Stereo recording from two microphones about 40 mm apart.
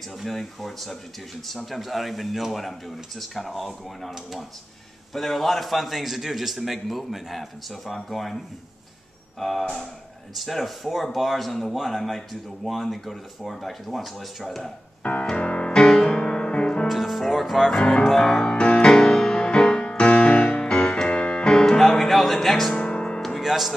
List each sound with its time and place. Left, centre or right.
0.2 s speech: centre
9.4 s speech: centre
15.2 s music: left
16.8 s music: centre
17.3 s speech: centre
18.2 s music: centre
21.8 s music: centre
22.8 s music: left
23.4 s speech: centre